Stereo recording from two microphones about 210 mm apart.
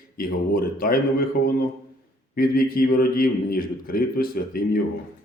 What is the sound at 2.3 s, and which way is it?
A man's voice, 45° left (ahead or behind).